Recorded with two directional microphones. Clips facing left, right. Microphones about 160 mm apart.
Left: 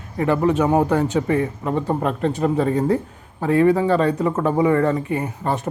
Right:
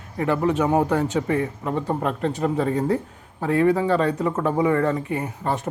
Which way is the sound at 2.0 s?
25° left (ahead or behind).